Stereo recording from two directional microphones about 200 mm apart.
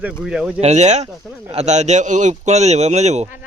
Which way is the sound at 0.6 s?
35° right (ahead or behind).